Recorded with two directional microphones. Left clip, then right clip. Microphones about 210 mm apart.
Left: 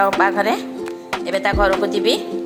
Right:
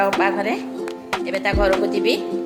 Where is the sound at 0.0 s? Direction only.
5° left (ahead or behind).